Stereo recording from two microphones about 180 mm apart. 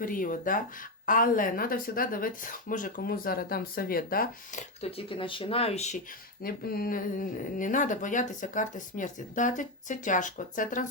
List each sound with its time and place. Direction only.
0.0 s speech: 50° left (ahead or behind)
4.8 s speech: 30° left (ahead or behind)
6.4 s speech: 55° left (ahead or behind)